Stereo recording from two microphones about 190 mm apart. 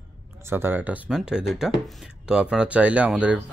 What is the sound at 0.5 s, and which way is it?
Speech, 10° right (ahead or behind).